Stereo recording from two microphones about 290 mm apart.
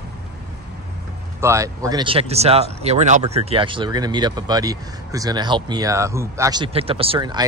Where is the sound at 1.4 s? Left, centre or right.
Centre.